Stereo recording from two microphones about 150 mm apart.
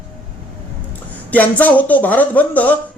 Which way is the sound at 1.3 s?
10° left (ahead or behind).